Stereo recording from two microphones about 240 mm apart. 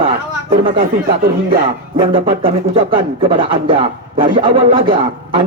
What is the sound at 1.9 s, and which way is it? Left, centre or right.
Speech, right.